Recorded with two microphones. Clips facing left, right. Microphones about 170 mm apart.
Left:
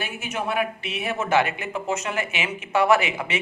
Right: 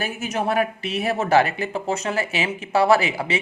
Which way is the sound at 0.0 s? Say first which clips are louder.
Right 4 dB; 40° right (ahead or behind).